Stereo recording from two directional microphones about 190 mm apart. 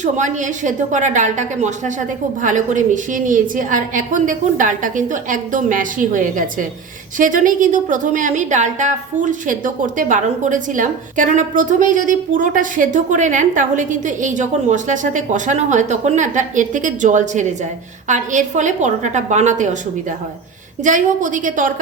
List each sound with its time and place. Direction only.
0.0 s a woman's voice: 40° right (ahead or behind)